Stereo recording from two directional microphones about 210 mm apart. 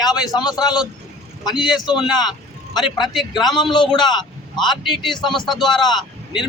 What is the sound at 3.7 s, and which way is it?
A man's voice, 20° left (ahead or behind).